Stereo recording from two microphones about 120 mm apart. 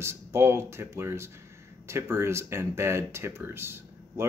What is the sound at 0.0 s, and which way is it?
Speech, 20° right (ahead or behind).